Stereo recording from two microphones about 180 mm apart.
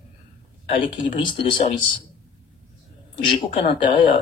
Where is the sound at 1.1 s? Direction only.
30° left (ahead or behind).